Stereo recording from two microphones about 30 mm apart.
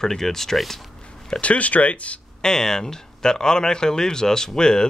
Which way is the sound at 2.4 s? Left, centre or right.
Left.